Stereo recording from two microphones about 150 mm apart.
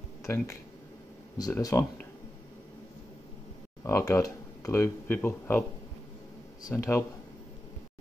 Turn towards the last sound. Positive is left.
turn(degrees=20)  # may be behind; listen again after turning